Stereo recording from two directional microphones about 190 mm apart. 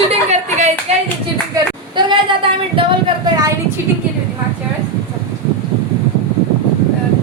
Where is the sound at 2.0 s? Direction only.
25° right (ahead or behind).